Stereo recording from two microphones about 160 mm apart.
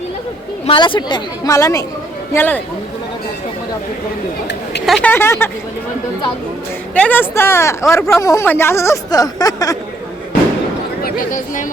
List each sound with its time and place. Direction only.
0.6 s speech: 35° left (ahead or behind); by 2.6 s 10° left (ahead or behind)
4.9 s speech: 10° left (ahead or behind)
6.9 s speech: 10° left (ahead or behind)
11.0 s speech: 55° left (ahead or behind)